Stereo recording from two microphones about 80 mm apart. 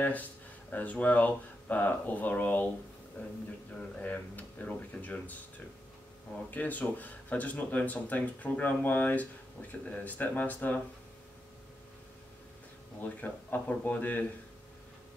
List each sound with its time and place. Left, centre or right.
0.7 s speech: left
4.0 s speech: centre
6.5 s speech: left
13.0 s speech: left